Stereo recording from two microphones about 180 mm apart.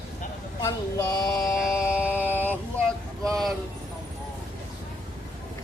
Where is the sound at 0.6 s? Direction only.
20° left (ahead or behind).